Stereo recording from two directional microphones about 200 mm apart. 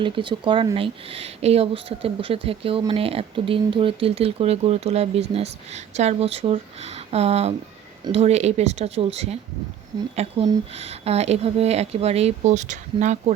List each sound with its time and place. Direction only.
0.0 s speech: 25° right (ahead or behind)
10.8 s speech: 30° right (ahead or behind)